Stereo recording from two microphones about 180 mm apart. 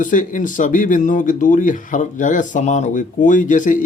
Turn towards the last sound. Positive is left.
turn(degrees=45)  # may be behind; listen again after turning